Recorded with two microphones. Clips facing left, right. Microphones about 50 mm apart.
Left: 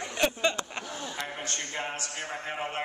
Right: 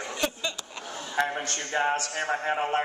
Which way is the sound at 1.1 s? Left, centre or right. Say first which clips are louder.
Right 11 dB; right.